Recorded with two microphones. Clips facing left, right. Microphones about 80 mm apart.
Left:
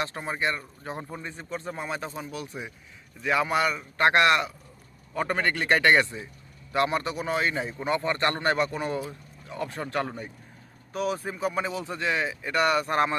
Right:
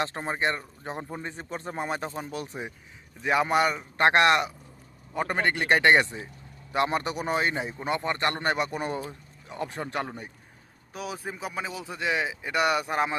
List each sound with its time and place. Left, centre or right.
0.0 s a man's voice: right
9.8 s speech: centre
12.9 s speech: centre